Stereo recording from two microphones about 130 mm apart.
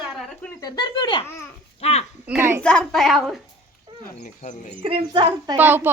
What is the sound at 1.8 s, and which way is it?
Speech, 55° left (ahead or behind).